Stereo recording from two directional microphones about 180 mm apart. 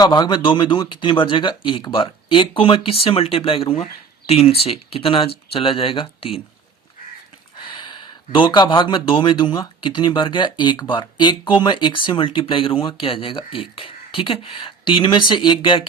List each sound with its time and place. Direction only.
0.0 s speech: 25° left (ahead or behind)
7.7 s speech: 25° left (ahead or behind)